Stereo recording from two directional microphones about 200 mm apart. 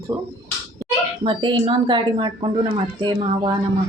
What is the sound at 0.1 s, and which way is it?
Speech, 15° right (ahead or behind).